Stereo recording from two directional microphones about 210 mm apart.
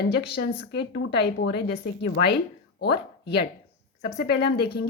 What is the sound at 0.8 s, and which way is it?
Speech, 55° left (ahead or behind).